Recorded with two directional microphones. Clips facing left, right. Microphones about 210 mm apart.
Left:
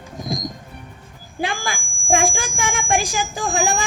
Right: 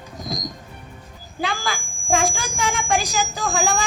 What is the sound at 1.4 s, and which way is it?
A woman's voice, 50° left (ahead or behind).